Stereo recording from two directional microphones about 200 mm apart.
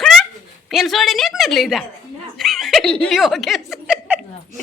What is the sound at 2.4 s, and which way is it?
Snicker, centre (ahead or behind).